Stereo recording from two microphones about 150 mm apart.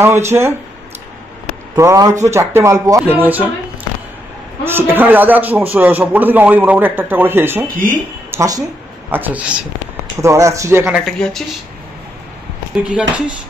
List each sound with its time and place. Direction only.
0.0 s a man's voice: 15° right (ahead or behind)
1.8 s speech: 20° right (ahead or behind)
4.6 s a man's voice: 15° right (ahead or behind)
7.6 s speech: 65° right (ahead or behind)
8.3 s speech: 20° right (ahead or behind)
9.1 s a man's voice: 10° right (ahead or behind)
10.2 s speech: 20° right (ahead or behind)
10.9 s speech: centre (ahead or behind)
12.8 s a man's voice: 10° right (ahead or behind)